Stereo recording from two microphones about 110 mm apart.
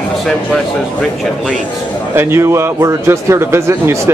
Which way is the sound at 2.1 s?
25° right (ahead or behind).